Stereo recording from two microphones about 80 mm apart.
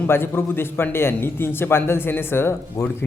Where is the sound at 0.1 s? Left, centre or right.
Left.